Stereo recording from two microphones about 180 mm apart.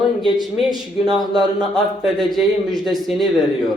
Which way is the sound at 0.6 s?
Centre (ahead or behind).